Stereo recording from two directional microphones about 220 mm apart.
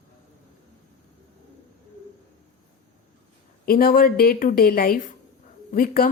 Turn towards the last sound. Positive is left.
turn(degrees=40)  # may be behind; listen again after turning